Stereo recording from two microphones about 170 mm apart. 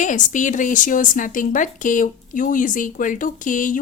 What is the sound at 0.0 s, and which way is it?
Speech, 50° left (ahead or behind).